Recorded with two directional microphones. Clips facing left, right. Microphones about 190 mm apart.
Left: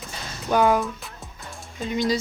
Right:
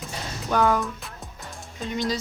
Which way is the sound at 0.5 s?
10° left (ahead or behind).